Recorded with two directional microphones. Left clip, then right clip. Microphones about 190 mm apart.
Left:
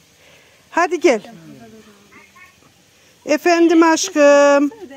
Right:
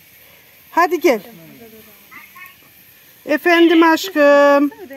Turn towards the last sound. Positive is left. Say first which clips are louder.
# even
turn(degrees=0)  # may be behind; listen again after turning